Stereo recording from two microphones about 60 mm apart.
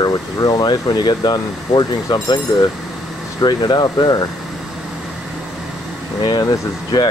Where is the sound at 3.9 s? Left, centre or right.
Left.